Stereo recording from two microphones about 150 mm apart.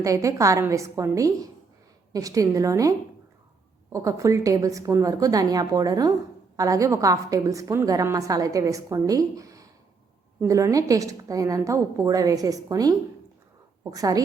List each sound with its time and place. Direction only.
0.0 s a woman's voice: 20° right (ahead or behind)
3.9 s a woman's voice: 20° right (ahead or behind)
13.9 s a woman's voice: 25° right (ahead or behind)